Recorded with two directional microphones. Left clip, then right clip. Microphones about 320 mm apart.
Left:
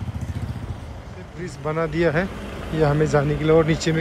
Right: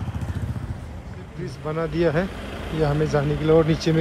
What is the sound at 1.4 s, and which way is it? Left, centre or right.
Speech, centre.